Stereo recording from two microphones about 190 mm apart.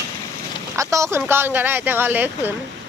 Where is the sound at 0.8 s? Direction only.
15° right (ahead or behind).